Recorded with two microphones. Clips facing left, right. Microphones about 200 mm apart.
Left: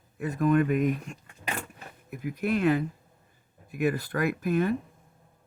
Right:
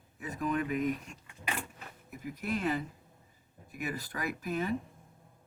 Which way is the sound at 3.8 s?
60° left (ahead or behind).